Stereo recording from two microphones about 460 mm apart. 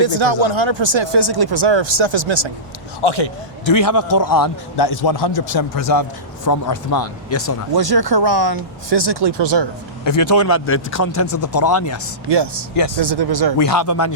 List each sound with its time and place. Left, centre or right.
0.0 s speech: right
3.0 s speech: left
3.7 s a man's voice: left
5.5 s a man's voice: left
7.3 s speech: left
7.7 s speech: right
10.3 s speech: left
12.3 s speech: right
13.7 s speech: left